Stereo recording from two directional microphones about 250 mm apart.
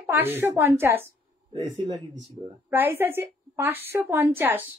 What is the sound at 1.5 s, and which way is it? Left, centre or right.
Speech, right.